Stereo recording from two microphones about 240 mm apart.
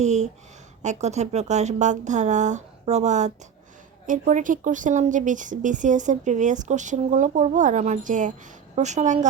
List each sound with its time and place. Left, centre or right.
0.0 s a woman's voice: right